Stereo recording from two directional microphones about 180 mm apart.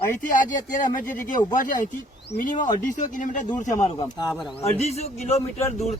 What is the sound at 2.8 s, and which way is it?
Speech, 45° left (ahead or behind).